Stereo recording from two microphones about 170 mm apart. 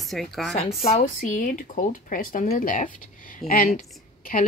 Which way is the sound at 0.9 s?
45° left (ahead or behind).